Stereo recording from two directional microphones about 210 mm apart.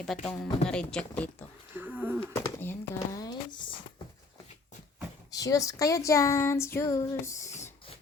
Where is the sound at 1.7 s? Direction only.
10° right (ahead or behind).